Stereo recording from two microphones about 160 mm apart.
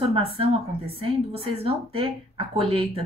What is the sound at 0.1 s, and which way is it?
A woman's voice, 35° right (ahead or behind).